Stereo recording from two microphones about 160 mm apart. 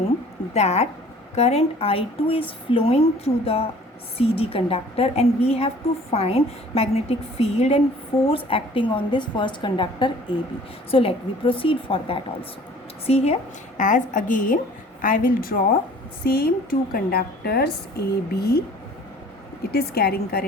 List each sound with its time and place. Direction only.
0.5 s a woman's voice: 45° left (ahead or behind); by 18.6 s 80° left
19.7 s a woman's voice: 80° left